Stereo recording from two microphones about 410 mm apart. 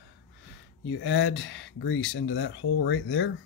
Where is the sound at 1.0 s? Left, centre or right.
Left.